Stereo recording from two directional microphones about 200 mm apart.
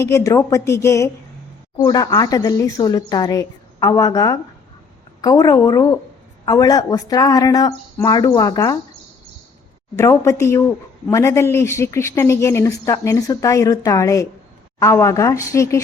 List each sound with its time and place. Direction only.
0.0 s a woman's voice: 15° left (ahead or behind)
9.9 s speech: 15° left (ahead or behind)